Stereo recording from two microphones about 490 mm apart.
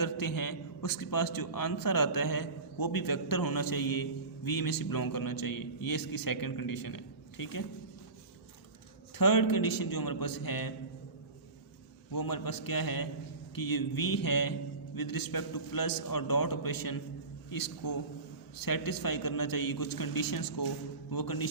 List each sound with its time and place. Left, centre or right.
0.0 s a man's voice: left
9.1 s a man's voice: left
12.1 s a man's voice: left